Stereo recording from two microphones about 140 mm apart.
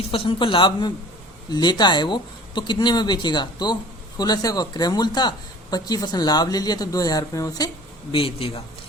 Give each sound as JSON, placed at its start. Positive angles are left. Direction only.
{"t": 0.1, "sound": "a woman's voice", "side_deg": 35}
{"t": 8.1, "sound": "speech", "side_deg": 40}